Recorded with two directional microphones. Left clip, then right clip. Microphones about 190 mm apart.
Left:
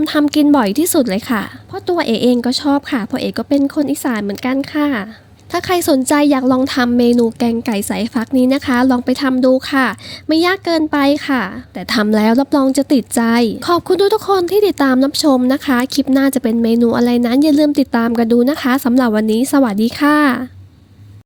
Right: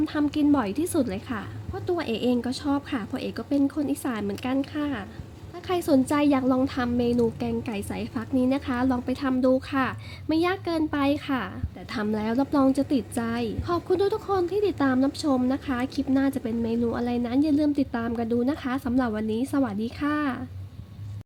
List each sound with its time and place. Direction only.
0.0 s a woman's voice: 45° left (ahead or behind)